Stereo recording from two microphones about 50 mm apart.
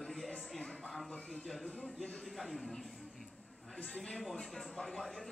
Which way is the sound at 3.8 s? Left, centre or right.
Centre.